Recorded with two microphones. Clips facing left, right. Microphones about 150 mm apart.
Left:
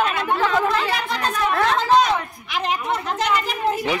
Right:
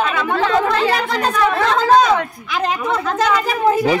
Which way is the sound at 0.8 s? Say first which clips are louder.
Right 6 dB; 90° right.